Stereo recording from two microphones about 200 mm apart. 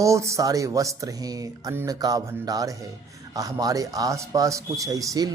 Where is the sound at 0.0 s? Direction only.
15° right (ahead or behind).